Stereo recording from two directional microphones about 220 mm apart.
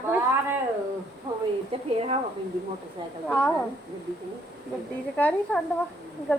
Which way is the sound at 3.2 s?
5° left (ahead or behind).